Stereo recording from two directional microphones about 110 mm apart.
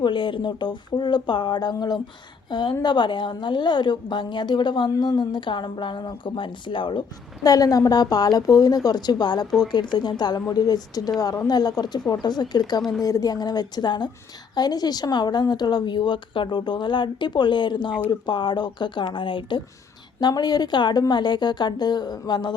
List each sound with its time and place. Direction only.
0.0 s a woman's voice: 50° left (ahead or behind)
7.4 s a woman's voice: 35° left (ahead or behind)